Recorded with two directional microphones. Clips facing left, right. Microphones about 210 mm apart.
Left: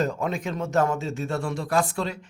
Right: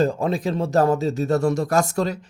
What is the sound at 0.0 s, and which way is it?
Speech, 30° right (ahead or behind).